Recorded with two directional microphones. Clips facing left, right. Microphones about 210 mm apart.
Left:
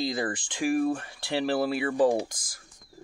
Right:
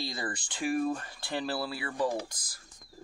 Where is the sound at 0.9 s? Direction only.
75° left (ahead or behind).